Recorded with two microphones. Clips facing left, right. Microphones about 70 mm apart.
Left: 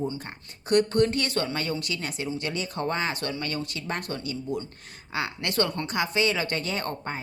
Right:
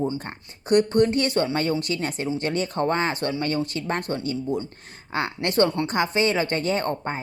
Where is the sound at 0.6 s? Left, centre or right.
Right.